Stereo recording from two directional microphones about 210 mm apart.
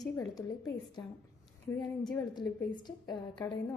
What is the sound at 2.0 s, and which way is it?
A woman's voice, 20° left (ahead or behind).